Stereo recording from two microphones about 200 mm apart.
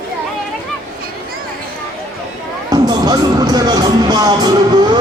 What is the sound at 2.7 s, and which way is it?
Music, 20° right (ahead or behind).